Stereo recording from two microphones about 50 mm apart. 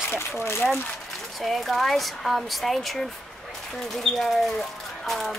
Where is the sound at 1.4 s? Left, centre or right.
Centre.